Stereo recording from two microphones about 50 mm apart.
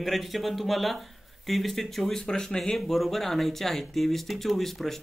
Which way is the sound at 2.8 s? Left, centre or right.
Centre.